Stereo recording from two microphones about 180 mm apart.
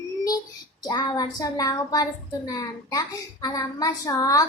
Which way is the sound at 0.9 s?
25° left (ahead or behind).